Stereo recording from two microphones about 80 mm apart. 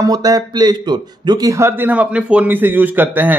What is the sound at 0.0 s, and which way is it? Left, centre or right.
A man's voice, right.